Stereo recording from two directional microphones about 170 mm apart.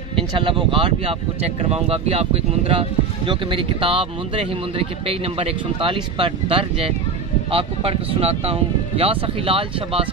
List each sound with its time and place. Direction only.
0.1 s speech: 30° right (ahead or behind)